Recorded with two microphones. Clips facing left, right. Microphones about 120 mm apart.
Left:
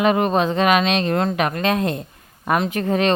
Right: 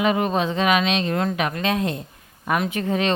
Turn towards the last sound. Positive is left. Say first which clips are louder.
# left 3 dB
turn(degrees=50)  # may be behind; listen again after turning